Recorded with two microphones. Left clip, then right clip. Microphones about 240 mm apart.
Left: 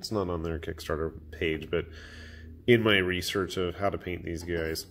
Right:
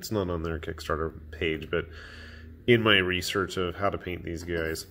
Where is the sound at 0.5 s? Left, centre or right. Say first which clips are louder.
Right 2 dB; centre.